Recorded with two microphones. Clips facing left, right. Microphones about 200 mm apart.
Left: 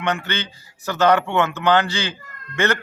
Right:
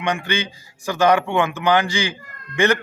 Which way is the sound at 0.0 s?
15° right (ahead or behind).